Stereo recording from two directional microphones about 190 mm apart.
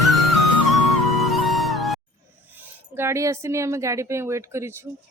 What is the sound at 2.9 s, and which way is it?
Speech, 15° right (ahead or behind).